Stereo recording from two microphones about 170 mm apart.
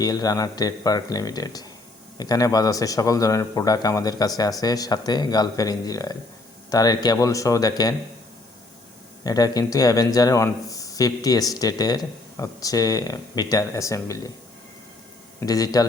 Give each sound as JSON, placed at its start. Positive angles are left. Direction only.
{"t": 0.0, "sound": "speech", "side_deg": 20}
{"t": 9.2, "sound": "speech", "side_deg": 20}
{"t": 15.4, "sound": "speech", "side_deg": 20}